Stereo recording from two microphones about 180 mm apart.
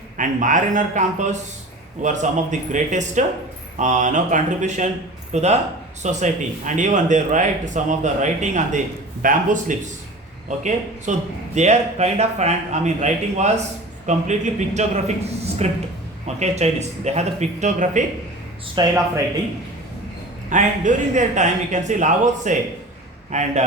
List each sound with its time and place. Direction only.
0.2 s a man's voice: 45° right (ahead or behind)
18.7 s speech: 20° right (ahead or behind)
20.5 s a man's voice: 45° right (ahead or behind)